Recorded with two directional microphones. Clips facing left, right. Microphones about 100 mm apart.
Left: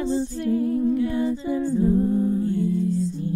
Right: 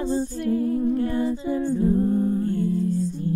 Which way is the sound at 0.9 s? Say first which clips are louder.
Left 1 dB; 40° right (ahead or behind).